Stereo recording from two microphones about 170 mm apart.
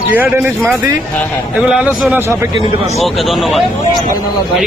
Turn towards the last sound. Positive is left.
turn(degrees=0)  # may be behind; listen again after turning